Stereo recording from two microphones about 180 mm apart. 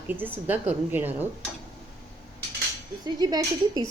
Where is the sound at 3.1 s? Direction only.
20° right (ahead or behind).